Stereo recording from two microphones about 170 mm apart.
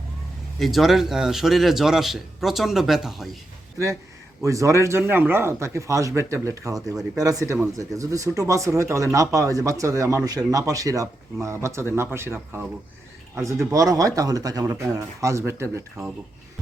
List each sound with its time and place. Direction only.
0.6 s a man's voice: centre (ahead or behind)
4.4 s speech: 20° right (ahead or behind)